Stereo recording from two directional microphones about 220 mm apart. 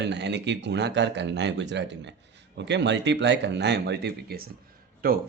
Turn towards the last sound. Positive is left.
turn(degrees=-40)  # may be behind; listen again after turning